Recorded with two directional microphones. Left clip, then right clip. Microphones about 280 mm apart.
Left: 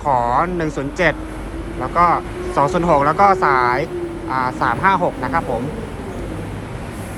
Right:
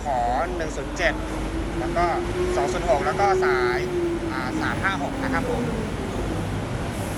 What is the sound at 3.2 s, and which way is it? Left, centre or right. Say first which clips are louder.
Speech: left 7 dB; centre.